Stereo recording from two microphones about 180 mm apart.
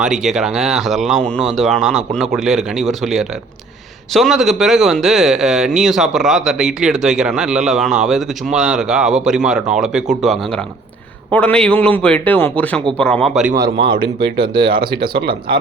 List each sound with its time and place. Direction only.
0.0 s a man's voice: centre (ahead or behind)
13.7 s speech: 25° right (ahead or behind)